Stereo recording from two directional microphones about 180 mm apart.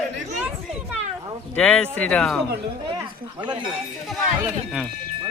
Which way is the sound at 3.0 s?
25° right (ahead or behind).